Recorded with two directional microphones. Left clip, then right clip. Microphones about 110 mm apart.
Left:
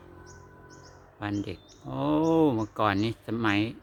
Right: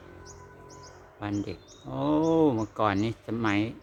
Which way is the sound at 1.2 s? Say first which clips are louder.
Even; 25° left (ahead or behind).